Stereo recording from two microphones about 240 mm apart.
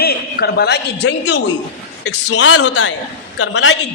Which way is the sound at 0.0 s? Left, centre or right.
Left.